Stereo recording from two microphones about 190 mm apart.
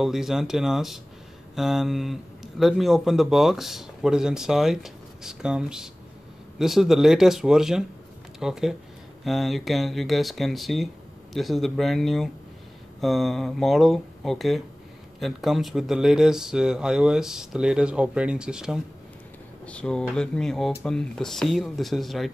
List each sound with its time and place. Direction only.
0.0 s speech: centre (ahead or behind)